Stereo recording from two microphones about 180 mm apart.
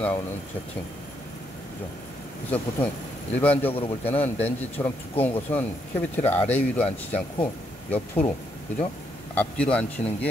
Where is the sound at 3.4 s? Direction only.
10° left (ahead or behind).